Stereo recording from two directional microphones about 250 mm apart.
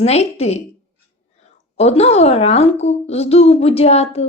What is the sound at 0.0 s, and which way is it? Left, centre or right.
A woman's voice, left.